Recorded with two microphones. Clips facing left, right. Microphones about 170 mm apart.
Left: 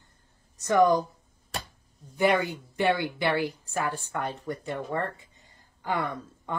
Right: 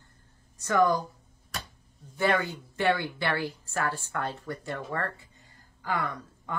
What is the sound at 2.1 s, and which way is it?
A woman's voice, 15° left (ahead or behind).